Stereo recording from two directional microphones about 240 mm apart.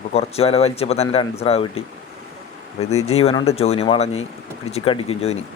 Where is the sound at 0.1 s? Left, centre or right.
Left.